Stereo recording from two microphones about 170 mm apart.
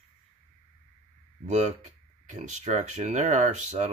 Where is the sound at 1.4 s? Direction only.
45° right (ahead or behind).